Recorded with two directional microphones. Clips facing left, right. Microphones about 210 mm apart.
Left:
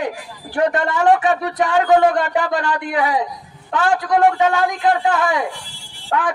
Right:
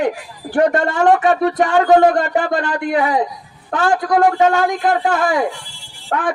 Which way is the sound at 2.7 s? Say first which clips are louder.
Right 2 dB; 35° right (ahead or behind).